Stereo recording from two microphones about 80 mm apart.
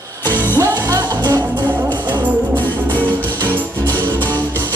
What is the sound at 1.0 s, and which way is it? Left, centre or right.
Music, right.